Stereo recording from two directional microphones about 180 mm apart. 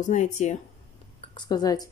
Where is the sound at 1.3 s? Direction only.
25° left (ahead or behind).